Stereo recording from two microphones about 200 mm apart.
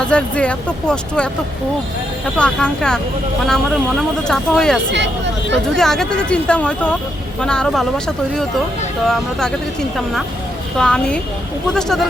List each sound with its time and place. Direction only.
0.0 s speech: 5° left (ahead or behind)
2.4 s speech: 5° left (ahead or behind)
4.9 s speech: 60° right (ahead or behind)
5.7 s speech: centre (ahead or behind)
10.8 s speech: 5° left (ahead or behind)